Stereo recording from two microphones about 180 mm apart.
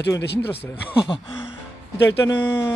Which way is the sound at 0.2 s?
70° left (ahead or behind).